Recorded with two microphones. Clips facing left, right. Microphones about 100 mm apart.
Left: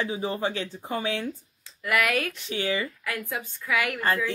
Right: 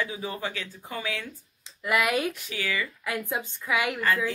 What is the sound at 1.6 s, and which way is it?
Speech, 20° right (ahead or behind).